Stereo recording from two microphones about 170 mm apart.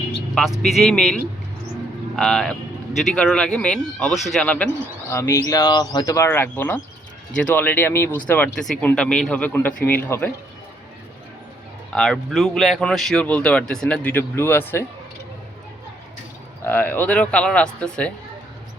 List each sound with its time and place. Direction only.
0.6 s speech: centre (ahead or behind)
2.1 s speech: 5° left (ahead or behind)
11.9 s speech: 5° left (ahead or behind)
16.6 s speech: 10° left (ahead or behind)